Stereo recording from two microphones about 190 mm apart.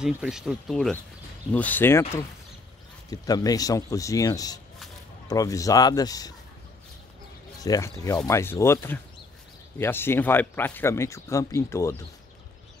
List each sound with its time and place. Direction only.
0.0 s speech: 5° right (ahead or behind); by 6.3 s 20° left (ahead or behind)
7.6 s speech: 20° left (ahead or behind)